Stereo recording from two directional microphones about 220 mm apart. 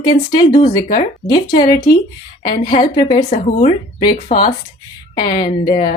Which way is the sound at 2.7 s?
20° left (ahead or behind).